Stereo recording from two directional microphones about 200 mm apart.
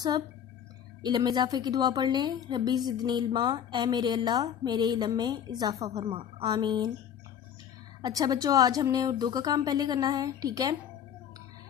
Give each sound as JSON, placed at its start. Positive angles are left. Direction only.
{"t": 1.0, "sound": "a woman's voice", "side_deg": -20}
{"t": 8.0, "sound": "a woman's voice", "side_deg": -20}